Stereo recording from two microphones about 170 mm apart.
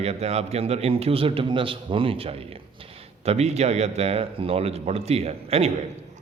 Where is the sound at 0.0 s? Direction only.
40° right (ahead or behind).